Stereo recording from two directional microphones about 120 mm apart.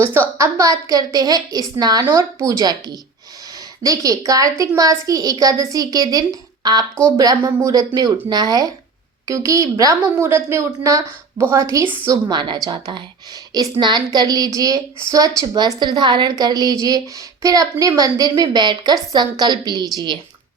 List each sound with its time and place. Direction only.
0.0 s a woman's voice: 20° right (ahead or behind); by 20.1 s 35° right (ahead or behind)